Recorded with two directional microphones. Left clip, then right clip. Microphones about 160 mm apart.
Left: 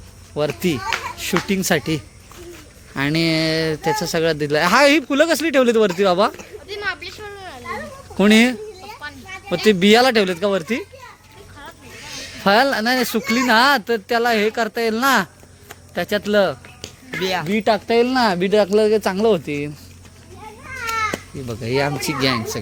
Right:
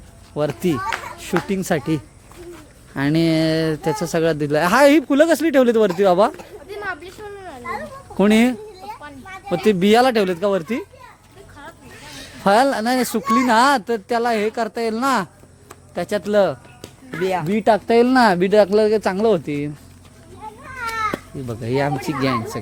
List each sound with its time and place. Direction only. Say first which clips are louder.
0.3 s speech: even; 15° right (ahead or behind)
1.5 s speech: left 2 dB; 5° right (ahead or behind)
2.9 s speech: right 1 dB; 20° right (ahead or behind)
6.8 s a sound: left 3 dB; 65° right (ahead or behind)
8.1 s a sound: left 2 dB; 20° right (ahead or behind)
9.3 s speech: left 1 dB; 20° right (ahead or behind)
12.4 s speech: even; 20° right (ahead or behind)
16.8 s music: even; 75° right (ahead or behind)
17.4 s speech: right 3 dB; 45° right (ahead or behind); by 19.7 s 20° right (ahead or behind)
21.4 s speech: left 1 dB; 15° right (ahead or behind)